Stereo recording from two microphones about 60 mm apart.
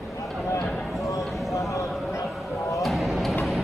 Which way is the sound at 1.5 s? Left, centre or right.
Left.